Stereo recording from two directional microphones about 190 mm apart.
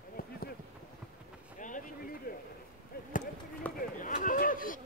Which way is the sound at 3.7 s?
45° left (ahead or behind).